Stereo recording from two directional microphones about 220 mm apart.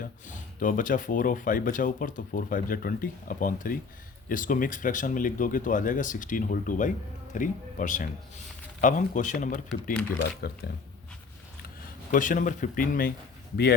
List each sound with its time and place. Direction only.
0.0 s speech: 35° left (ahead or behind)
10.2 s speech: 45° left (ahead or behind)
12.1 s speech: 35° left (ahead or behind)